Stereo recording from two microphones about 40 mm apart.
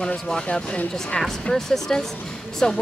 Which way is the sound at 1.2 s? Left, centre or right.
Centre.